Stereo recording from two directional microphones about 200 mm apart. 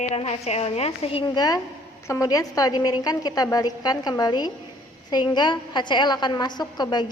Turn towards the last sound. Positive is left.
turn(degrees=20)  # may be behind; listen again after turning